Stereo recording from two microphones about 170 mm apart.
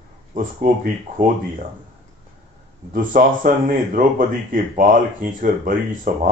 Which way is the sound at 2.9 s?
55° right (ahead or behind).